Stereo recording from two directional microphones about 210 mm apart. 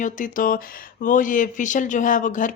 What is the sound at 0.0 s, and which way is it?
Speech, 40° left (ahead or behind).